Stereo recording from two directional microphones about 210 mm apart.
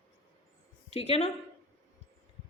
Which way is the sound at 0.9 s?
30° left (ahead or behind).